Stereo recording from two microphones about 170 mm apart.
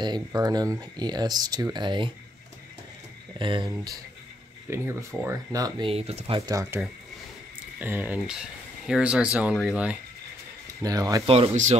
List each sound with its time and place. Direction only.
0.0 s speech: 25° right (ahead or behind)
3.3 s speech: 30° right (ahead or behind)
4.6 s speech: 15° right (ahead or behind)
5.9 s speech: 35° right (ahead or behind)
6.5 s speech: 20° right (ahead or behind)
7.8 s speech: 10° right (ahead or behind)
10.8 s speech: 20° right (ahead or behind)
11.2 s speech: 35° right (ahead or behind)